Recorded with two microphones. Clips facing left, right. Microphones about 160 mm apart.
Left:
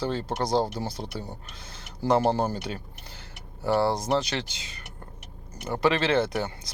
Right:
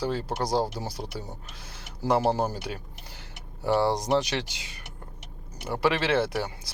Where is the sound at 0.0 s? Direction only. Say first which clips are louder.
Even; 10° right (ahead or behind).